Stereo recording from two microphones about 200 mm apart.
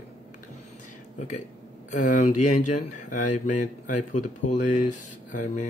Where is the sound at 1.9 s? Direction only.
40° left (ahead or behind).